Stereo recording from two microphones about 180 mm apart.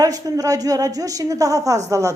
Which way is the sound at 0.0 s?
20° right (ahead or behind).